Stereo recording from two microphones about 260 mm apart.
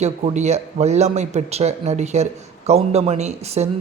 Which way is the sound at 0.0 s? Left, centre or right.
Right.